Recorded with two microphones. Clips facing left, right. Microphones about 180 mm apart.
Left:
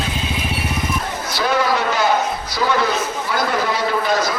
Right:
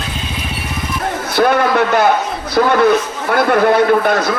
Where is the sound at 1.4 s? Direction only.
55° right (ahead or behind).